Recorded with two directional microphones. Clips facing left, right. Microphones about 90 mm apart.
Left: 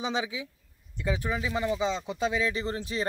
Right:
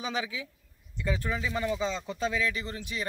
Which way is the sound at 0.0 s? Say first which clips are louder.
Left 2 dB; 20° left (ahead or behind).